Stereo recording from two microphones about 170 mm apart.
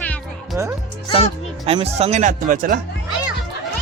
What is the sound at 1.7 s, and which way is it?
Speech, 35° right (ahead or behind).